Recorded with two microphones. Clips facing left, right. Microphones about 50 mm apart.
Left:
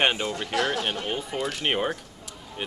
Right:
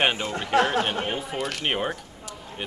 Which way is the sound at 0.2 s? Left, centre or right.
Right.